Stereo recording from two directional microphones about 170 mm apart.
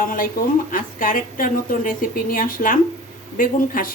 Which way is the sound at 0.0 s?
55° left (ahead or behind).